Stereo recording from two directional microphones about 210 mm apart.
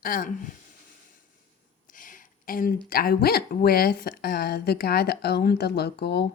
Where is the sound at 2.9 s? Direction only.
45° left (ahead or behind).